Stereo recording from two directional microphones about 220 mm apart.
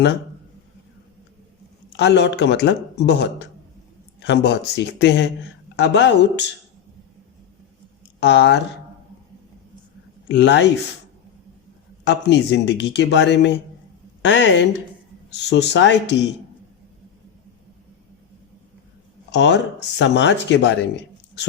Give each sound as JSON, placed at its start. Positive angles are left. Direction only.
{"t": 2.0, "sound": "speech", "side_deg": 50}
{"t": 8.2, "sound": "speech", "side_deg": 50}
{"t": 10.2, "sound": "speech", "side_deg": 50}
{"t": 12.0, "sound": "a woman's voice", "side_deg": 50}
{"t": 19.3, "sound": "speech", "side_deg": 50}